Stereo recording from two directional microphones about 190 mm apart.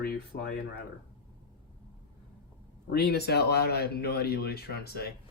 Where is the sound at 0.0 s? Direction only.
50° left (ahead or behind).